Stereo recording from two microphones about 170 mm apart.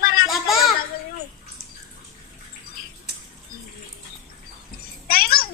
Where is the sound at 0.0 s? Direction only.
60° left (ahead or behind).